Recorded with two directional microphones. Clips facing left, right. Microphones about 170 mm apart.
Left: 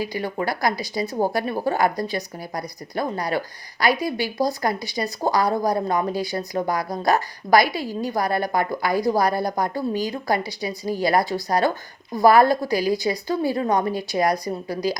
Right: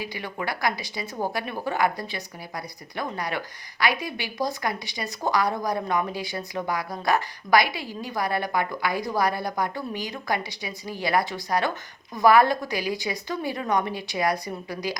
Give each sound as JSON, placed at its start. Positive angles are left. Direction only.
{"t": 0.0, "sound": "speech", "side_deg": 40}